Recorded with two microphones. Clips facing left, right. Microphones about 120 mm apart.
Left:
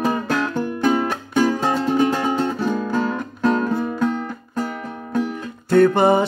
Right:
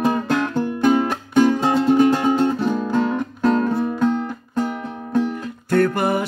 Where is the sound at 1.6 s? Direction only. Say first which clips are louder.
Right 2 dB; 25° right (ahead or behind).